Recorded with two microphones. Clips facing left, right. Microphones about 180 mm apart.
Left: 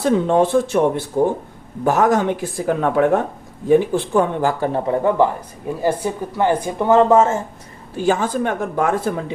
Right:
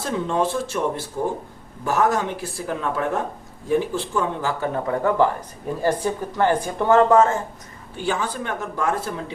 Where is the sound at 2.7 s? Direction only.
60° left (ahead or behind).